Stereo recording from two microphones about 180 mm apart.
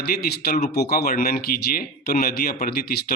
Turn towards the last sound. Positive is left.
turn(degrees=50)  # may be behind; listen again after turning